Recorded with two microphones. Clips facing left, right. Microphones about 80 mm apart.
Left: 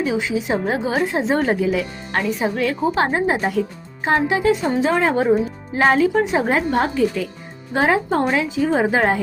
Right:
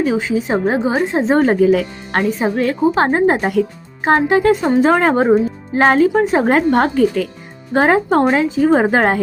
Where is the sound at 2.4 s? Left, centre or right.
Right.